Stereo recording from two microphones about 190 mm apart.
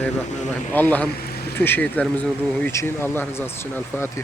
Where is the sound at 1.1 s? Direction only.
55° left (ahead or behind).